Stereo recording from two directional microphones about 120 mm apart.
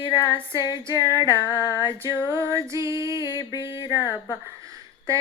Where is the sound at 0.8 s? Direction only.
25° right (ahead or behind).